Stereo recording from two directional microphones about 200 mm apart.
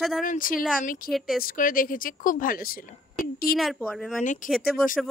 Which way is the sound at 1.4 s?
45° left (ahead or behind).